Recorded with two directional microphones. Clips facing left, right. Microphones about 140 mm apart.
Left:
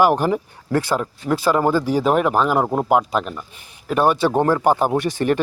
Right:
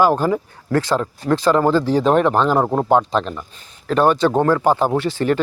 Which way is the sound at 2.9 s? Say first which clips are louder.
Right 2 dB; 10° left (ahead or behind).